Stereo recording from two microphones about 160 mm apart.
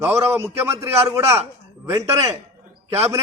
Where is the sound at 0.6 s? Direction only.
15° right (ahead or behind).